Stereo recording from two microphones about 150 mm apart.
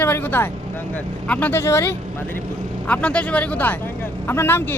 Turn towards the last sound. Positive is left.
turn(degrees=15)  # may be behind; listen again after turning